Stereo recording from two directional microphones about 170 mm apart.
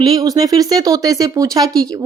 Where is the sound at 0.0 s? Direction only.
20° right (ahead or behind).